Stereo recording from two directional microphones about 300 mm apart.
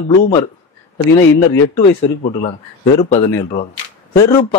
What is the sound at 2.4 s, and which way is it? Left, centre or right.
Speech, left.